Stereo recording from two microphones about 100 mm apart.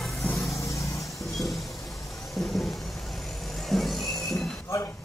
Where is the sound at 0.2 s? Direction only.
25° left (ahead or behind).